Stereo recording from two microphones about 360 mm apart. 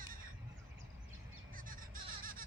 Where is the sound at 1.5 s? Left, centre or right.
Right.